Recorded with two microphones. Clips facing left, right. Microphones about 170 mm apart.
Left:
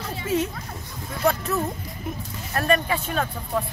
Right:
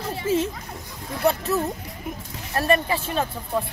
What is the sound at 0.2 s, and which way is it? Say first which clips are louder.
Children playing: right 2 dB; 30° right (ahead or behind).